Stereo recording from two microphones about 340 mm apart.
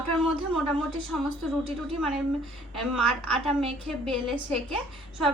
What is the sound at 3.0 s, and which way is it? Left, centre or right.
Speech, left.